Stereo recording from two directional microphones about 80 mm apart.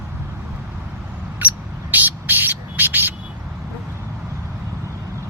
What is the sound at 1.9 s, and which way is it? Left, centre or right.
Music, right.